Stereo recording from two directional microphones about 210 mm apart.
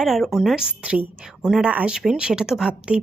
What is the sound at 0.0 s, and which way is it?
Speech, centre (ahead or behind).